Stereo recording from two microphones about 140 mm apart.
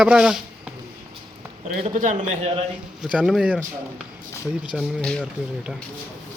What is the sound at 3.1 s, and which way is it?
Speech, 10° right (ahead or behind).